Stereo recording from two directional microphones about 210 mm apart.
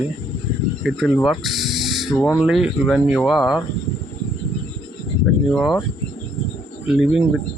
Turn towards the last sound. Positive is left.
turn(degrees=-5)  # may be behind; listen again after turning